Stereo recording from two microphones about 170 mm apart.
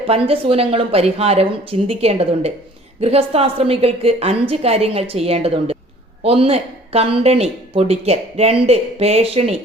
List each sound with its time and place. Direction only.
0.1 s speech: 35° right (ahead or behind)